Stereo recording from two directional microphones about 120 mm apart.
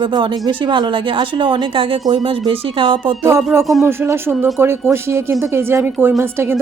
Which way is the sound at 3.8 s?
20° right (ahead or behind).